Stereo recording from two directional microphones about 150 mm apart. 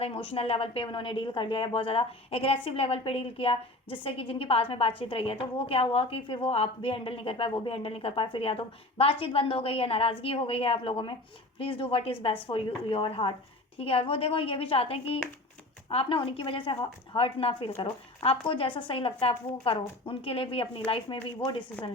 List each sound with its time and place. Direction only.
0.0 s speech: 40° left (ahead or behind)